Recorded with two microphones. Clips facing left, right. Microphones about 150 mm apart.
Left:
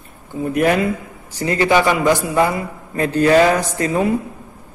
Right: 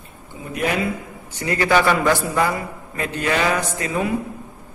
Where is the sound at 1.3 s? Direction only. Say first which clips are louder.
Left 4 dB; 30° left (ahead or behind).